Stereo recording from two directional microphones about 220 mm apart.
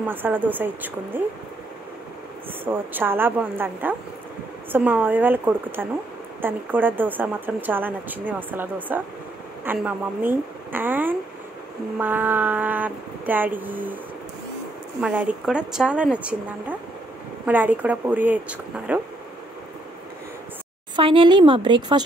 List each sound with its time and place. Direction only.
0.1 s speech: 10° right (ahead or behind)
2.6 s speech: 10° right (ahead or behind)
15.0 s speech: 5° right (ahead or behind)
20.9 s speech: 25° right (ahead or behind)